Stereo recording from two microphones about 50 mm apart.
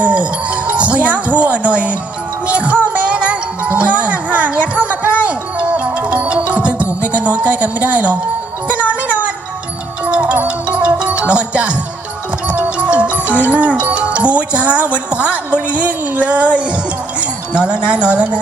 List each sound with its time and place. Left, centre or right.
0.0 s music: right
12.7 s speech: right
15.5 s a sound: right
17.2 s speech: right